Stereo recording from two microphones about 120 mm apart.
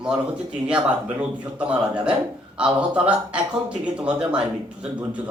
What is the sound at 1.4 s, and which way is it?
Speech, 10° right (ahead or behind).